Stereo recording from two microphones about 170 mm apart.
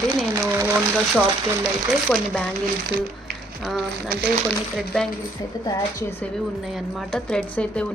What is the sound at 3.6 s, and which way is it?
Speech, centre (ahead or behind).